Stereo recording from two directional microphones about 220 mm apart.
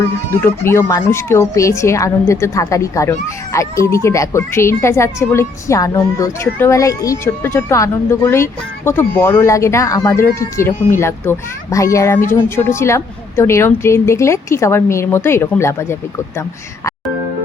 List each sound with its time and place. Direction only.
0.3 s speech: 10° left (ahead or behind)